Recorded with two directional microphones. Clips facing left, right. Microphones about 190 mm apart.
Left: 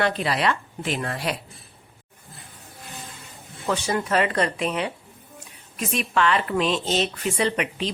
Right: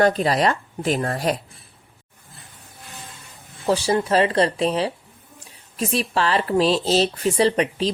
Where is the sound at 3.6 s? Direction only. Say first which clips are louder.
Right 5 dB; 30° right (ahead or behind).